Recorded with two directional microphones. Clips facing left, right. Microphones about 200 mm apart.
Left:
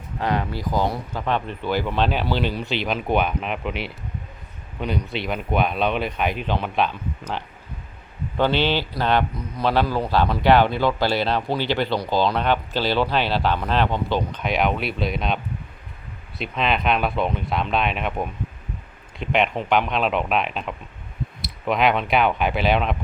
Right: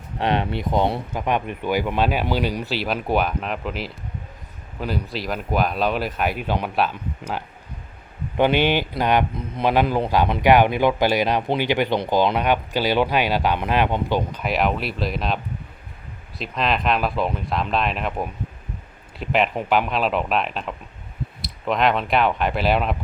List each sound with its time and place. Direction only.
0.2 s speech: 25° right (ahead or behind)
1.1 s speech: 15° right (ahead or behind)
16.4 s speech: centre (ahead or behind)